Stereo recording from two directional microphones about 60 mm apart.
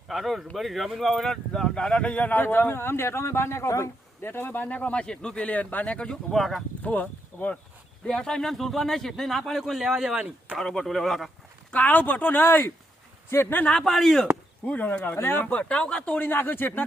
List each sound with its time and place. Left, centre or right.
0.1 s speech: centre; by 3.8 s left
4.2 s speech: left; by 5.4 s centre
5.4 s speech: left
6.3 s speech: centre
6.8 s speech: left
8.0 s speech: centre
10.2 s speech: centre
10.6 s speech: centre
11.7 s speech: left
13.7 s speech: centre
14.7 s speech: left
15.1 s speech: left
15.5 s speech: centre
16.2 s speech: left